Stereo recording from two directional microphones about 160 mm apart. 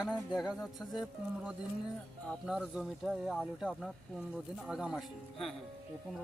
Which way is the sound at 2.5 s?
Centre (ahead or behind).